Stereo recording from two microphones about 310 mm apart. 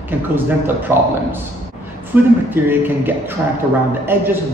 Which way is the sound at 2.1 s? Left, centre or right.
Centre.